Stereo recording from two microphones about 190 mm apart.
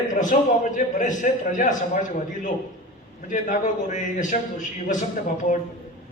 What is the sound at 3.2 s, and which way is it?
A man's voice, 40° left (ahead or behind).